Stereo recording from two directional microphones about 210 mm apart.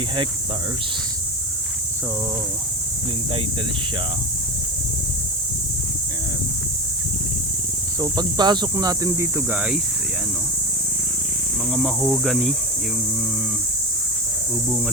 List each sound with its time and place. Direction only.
7.9 s speech: 20° right (ahead or behind)
11.7 s speech: centre (ahead or behind)